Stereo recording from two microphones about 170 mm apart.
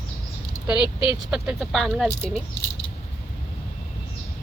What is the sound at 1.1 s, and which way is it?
Speech, 5° right (ahead or behind).